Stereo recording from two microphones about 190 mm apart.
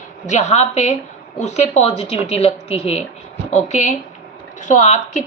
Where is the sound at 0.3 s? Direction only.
40° left (ahead or behind).